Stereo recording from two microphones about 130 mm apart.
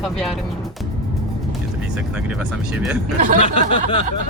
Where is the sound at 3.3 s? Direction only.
45° left (ahead or behind).